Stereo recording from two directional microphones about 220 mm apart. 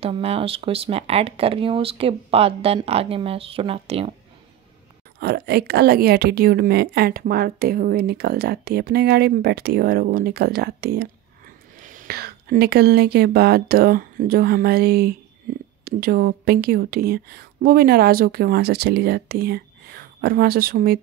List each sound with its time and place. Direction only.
0.0 s speech: 25° right (ahead or behind)
5.2 s a woman's voice: 45° right (ahead or behind)